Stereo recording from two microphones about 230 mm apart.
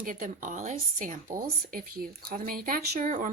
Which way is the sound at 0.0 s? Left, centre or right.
Right.